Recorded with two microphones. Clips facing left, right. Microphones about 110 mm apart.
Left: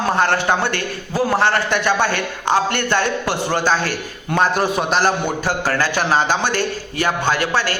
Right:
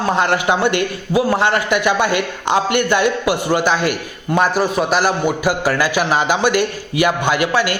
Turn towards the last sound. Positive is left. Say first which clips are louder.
# right 2 dB
turn(degrees=-15)  # may be behind; listen again after turning